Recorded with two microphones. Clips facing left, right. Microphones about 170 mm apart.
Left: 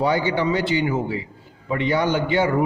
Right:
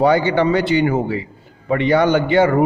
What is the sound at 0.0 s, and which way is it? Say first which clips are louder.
A man's voice: right 6 dB; 65° right (ahead or behind).